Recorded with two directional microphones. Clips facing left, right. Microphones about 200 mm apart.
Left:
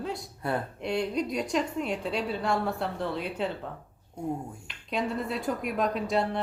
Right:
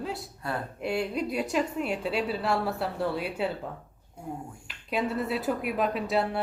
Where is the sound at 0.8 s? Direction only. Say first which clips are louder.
Right 1 dB; 5° right (ahead or behind).